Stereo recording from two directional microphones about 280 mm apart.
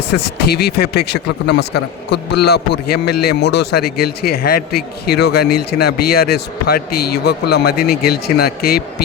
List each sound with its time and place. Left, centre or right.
0.1 s speech: left